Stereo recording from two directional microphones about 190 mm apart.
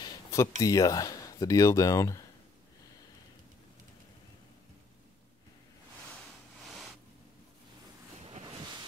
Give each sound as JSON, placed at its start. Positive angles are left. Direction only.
{"t": 0.0, "sound": "speech", "side_deg": 15}
{"t": 6.6, "sound": "a sound", "side_deg": 0}
{"t": 8.2, "sound": "ocean", "side_deg": -30}